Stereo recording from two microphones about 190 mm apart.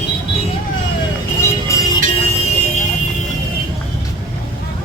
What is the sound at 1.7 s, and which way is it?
Music, 15° left (ahead or behind).